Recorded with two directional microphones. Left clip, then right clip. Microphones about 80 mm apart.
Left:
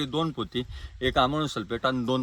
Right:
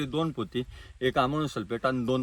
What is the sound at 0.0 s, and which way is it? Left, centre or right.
Speech, left.